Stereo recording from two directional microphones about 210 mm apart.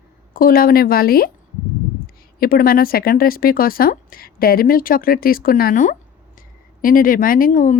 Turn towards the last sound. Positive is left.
turn(degrees=40)  # may be behind; listen again after turning